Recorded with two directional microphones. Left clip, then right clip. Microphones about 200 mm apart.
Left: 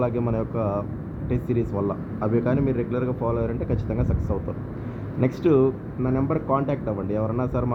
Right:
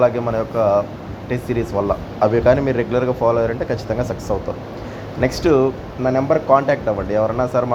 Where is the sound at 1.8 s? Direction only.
15° right (ahead or behind).